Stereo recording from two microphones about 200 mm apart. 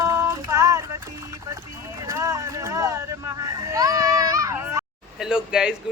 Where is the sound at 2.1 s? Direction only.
15° right (ahead or behind).